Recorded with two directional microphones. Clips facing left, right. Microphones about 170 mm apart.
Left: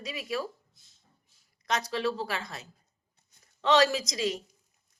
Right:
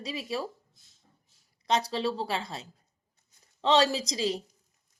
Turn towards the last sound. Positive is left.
turn(degrees=-30)  # may be behind; listen again after turning